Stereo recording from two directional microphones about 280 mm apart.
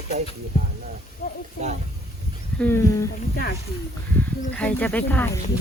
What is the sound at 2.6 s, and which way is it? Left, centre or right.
Speech, centre.